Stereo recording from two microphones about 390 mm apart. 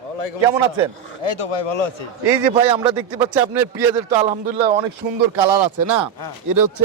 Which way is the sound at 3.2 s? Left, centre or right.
Centre.